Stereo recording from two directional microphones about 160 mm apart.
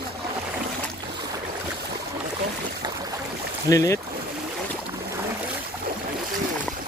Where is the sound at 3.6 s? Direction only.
20° left (ahead or behind).